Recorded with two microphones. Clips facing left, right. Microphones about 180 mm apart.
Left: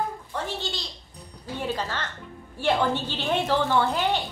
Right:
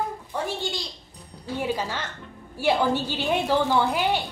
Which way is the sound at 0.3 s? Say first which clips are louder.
Right 3 dB; 10° right (ahead or behind).